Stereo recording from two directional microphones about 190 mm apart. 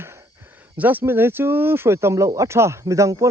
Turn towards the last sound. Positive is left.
turn(degrees=-15)  # may be behind; listen again after turning